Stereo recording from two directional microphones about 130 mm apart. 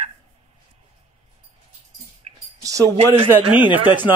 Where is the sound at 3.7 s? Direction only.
15° right (ahead or behind).